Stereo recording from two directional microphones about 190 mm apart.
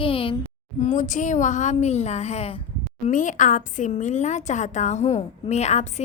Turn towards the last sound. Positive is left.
turn(degrees=35)  # may be behind; listen again after turning